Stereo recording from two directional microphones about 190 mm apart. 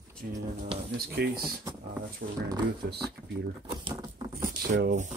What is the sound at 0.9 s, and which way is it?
Speech, 55° right (ahead or behind).